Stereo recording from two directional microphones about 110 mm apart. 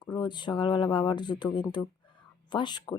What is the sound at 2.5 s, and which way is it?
Speech, 45° left (ahead or behind).